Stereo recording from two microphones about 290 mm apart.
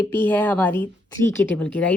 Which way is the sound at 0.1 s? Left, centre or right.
Centre.